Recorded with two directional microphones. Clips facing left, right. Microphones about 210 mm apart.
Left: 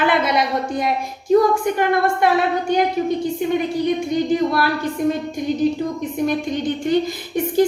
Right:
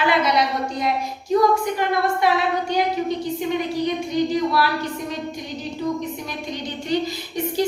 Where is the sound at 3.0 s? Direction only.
50° left (ahead or behind).